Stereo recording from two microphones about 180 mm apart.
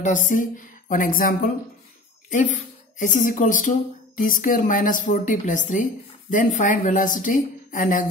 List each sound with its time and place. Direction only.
0.0 s a woman's voice: 45° left (ahead or behind)